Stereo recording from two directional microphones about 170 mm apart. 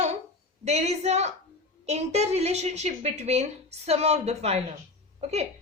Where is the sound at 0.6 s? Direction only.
40° right (ahead or behind).